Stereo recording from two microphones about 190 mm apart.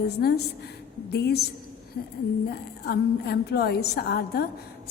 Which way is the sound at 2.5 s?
55° left (ahead or behind).